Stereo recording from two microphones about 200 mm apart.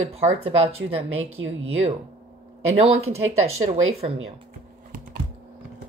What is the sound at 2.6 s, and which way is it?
A woman's voice, 30° right (ahead or behind).